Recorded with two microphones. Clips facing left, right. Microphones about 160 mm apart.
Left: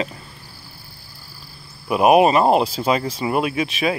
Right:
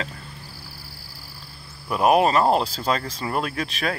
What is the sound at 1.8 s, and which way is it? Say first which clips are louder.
Speech: left 4 dB; 15° left (ahead or behind).